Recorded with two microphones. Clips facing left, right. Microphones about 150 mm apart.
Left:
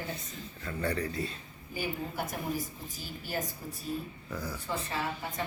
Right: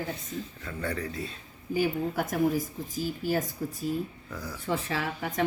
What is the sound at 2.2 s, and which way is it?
Speech, 90° right.